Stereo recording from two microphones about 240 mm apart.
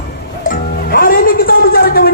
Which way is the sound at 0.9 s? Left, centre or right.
Left.